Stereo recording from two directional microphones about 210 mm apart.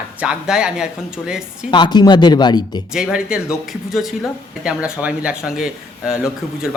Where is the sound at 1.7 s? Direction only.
20° left (ahead or behind).